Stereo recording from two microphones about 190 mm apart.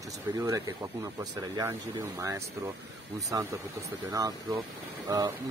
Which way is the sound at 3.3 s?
20° right (ahead or behind).